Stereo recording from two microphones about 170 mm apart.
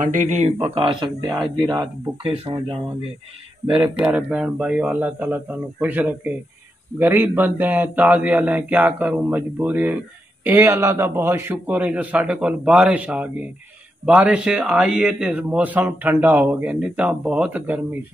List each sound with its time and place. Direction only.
0.1 s speech: 45° right (ahead or behind)
0.6 s speech: 30° right (ahead or behind)
3.8 s a man's voice: 10° right (ahead or behind)